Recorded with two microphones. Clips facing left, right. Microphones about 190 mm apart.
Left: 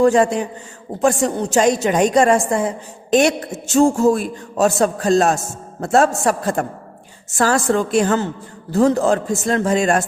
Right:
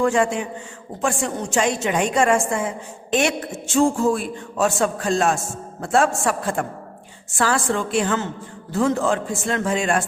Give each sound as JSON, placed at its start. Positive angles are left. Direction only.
{"t": 0.0, "sound": "a woman's voice", "side_deg": 40}